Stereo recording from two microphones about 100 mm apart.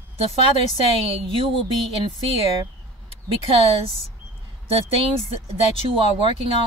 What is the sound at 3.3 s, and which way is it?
Speech, 65° right (ahead or behind).